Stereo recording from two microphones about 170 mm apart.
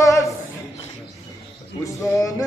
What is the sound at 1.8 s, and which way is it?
Music, 20° left (ahead or behind).